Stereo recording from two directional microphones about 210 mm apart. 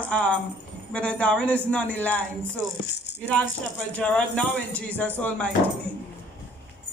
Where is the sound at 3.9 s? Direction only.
5° left (ahead or behind).